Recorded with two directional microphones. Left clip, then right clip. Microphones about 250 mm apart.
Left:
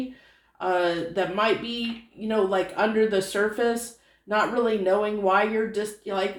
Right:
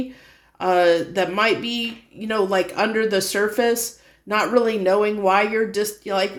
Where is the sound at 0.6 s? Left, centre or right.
Right.